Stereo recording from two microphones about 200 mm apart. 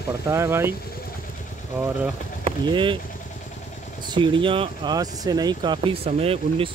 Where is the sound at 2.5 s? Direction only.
25° right (ahead or behind).